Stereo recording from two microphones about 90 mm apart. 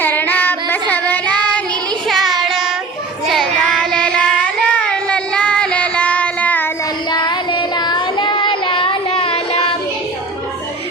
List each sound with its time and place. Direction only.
0.0 s child singing: 20° left (ahead or behind)
2.0 s music: centre (ahead or behind)
3.2 s child singing: 5° left (ahead or behind)
7.1 s child singing: 55° left (ahead or behind); by 9.7 s 90° left